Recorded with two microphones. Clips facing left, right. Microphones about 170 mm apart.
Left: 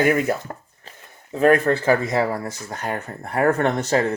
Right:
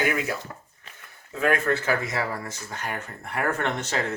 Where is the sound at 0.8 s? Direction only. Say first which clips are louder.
Left 4 dB; 35° left (ahead or behind).